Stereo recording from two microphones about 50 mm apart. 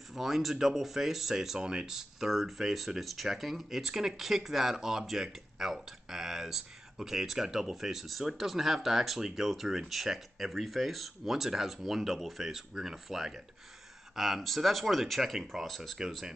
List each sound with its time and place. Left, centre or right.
0.1 s speech: centre